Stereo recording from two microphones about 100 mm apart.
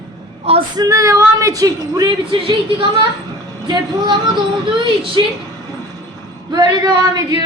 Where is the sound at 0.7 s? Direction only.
35° right (ahead or behind).